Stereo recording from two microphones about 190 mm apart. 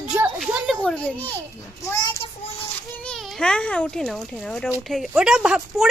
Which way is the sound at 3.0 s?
5° left (ahead or behind).